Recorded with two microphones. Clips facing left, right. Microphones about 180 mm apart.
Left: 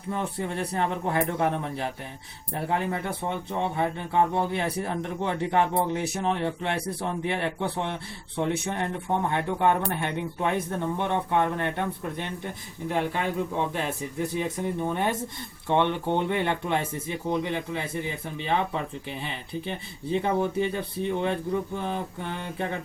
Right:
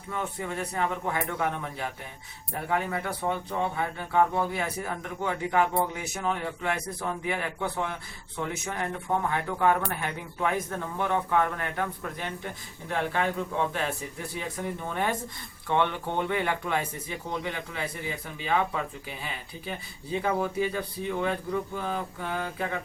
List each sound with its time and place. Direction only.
0.1 s speech: 35° left (ahead or behind)
3.8 s a man's voice: 25° left (ahead or behind)
12.9 s a man's voice: 15° left (ahead or behind)
20.2 s a man's voice: 25° left (ahead or behind)